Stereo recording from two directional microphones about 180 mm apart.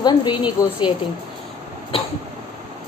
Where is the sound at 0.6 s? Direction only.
15° left (ahead or behind).